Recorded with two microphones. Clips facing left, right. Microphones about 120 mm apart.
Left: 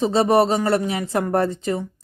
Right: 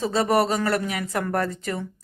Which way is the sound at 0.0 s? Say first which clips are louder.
Left 4 dB; 25° left (ahead or behind).